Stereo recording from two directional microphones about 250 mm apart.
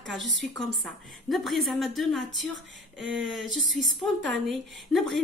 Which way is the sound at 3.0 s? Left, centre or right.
Right.